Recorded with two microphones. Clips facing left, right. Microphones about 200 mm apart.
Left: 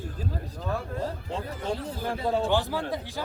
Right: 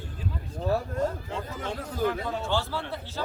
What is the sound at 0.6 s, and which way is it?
Speech, 40° right (ahead or behind).